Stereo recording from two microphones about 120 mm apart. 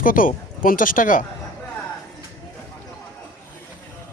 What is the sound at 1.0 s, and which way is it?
Speech, 90° left.